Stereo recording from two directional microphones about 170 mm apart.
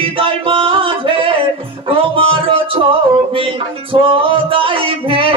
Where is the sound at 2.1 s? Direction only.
35° right (ahead or behind).